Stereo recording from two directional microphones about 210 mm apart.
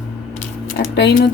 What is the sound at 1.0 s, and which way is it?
Speech, 55° left (ahead or behind).